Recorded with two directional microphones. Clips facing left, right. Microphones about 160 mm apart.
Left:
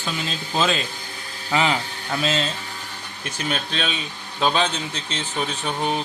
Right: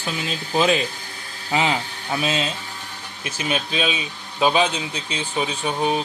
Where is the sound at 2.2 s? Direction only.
15° right (ahead or behind).